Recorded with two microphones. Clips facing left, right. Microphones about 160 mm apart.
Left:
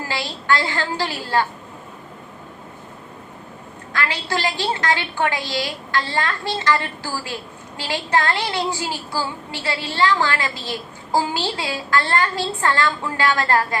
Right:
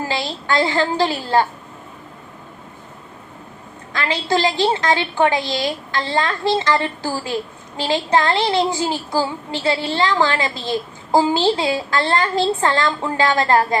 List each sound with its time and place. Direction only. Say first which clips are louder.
0.1 s a woman's voice: left 3 dB; 20° right (ahead or behind)
3.9 s a woman's voice: right 5 dB; 20° right (ahead or behind)